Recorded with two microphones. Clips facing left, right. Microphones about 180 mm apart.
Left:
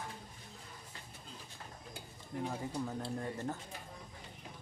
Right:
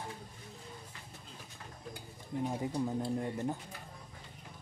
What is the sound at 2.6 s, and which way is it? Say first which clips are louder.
Speech: right 5 dB; 20° right (ahead or behind).